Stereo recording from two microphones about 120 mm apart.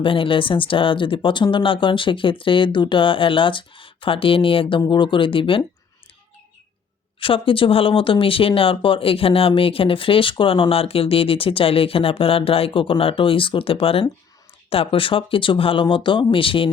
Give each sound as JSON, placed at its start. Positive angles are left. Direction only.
{"t": 0.0, "sound": "speech", "side_deg": 45}
{"t": 7.2, "sound": "speech", "side_deg": 45}